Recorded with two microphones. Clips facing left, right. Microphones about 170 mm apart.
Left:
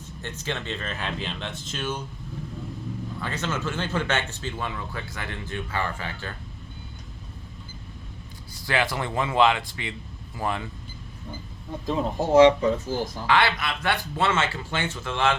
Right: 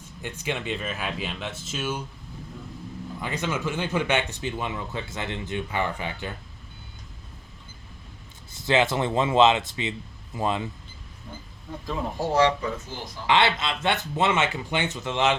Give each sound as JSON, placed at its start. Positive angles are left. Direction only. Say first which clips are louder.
{"t": 0.2, "sound": "speech", "louder": "right 2 dB", "side_deg": -10}
{"t": 3.2, "sound": "speech", "louder": "right 2 dB", "side_deg": -15}
{"t": 8.5, "sound": "speech", "louder": "right 4 dB", "side_deg": -20}
{"t": 11.9, "sound": "speech", "louder": "left 4 dB", "side_deg": 20}
{"t": 13.2, "sound": "speech", "louder": "right 2 dB", "side_deg": -20}